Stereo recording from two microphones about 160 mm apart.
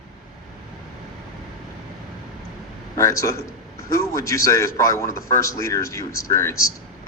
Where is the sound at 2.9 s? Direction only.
20° left (ahead or behind).